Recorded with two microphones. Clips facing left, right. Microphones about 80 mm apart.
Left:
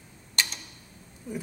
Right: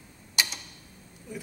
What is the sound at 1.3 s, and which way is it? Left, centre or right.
Speech, left.